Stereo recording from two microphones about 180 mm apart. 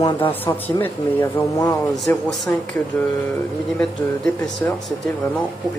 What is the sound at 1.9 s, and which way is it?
Speech, centre (ahead or behind).